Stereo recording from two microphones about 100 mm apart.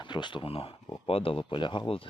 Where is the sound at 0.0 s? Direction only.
50° left (ahead or behind).